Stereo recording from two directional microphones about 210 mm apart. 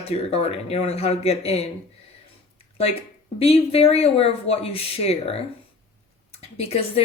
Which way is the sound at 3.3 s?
30° left (ahead or behind).